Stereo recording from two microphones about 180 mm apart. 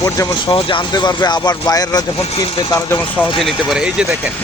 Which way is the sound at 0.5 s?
30° left (ahead or behind).